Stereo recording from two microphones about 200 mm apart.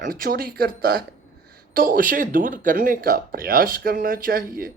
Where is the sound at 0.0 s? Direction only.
45° right (ahead or behind).